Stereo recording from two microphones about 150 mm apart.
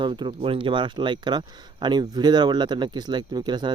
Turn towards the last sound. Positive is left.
turn(degrees=-30)  # may be behind; listen again after turning